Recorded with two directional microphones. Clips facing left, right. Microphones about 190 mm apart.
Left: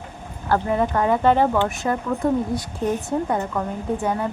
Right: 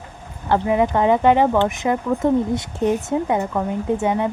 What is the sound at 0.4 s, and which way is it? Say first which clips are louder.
A woman's voice: right 3 dB; 15° right (ahead or behind).